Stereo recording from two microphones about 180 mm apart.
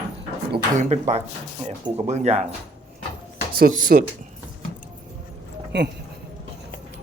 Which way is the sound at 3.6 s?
50° right (ahead or behind).